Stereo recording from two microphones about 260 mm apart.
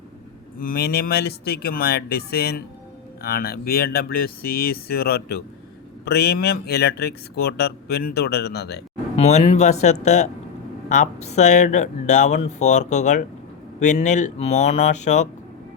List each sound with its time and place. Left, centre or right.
0.6 s speech: left
9.1 s speech: left